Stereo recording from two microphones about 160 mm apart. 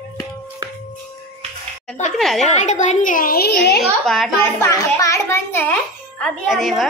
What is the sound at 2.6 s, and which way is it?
Speech, 45° left (ahead or behind).